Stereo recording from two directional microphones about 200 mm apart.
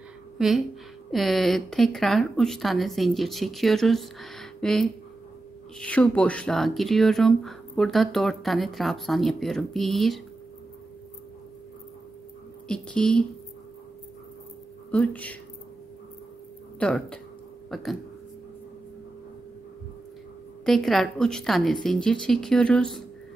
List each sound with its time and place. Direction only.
0.4 s a woman's voice: centre (ahead or behind)
12.6 s speech: 5° left (ahead or behind)
14.9 s speech: 5° left (ahead or behind)
16.8 s speech: 5° left (ahead or behind)
20.6 s speech: centre (ahead or behind)